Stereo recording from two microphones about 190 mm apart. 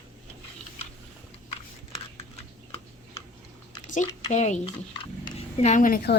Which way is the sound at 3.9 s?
40° left (ahead or behind).